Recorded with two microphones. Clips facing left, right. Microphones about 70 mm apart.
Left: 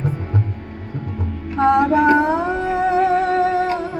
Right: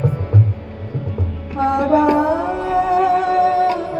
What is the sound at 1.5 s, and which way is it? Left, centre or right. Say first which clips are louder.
Music: left 3 dB; left.